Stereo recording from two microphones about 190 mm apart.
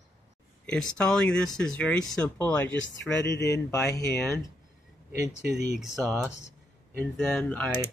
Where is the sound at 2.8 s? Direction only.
70° left (ahead or behind).